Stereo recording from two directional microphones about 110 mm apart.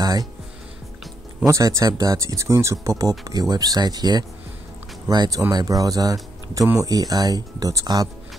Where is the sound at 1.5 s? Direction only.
30° right (ahead or behind).